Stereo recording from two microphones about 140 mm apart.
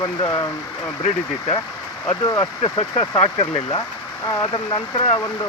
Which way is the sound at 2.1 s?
25° left (ahead or behind).